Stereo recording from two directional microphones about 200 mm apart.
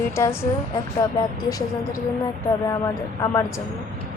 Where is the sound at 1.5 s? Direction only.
15° left (ahead or behind).